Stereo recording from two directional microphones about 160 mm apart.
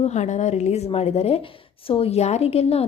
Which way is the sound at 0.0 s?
45° left (ahead or behind).